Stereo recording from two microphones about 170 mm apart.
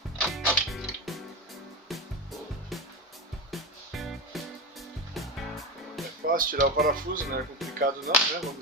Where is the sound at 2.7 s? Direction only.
Centre (ahead or behind).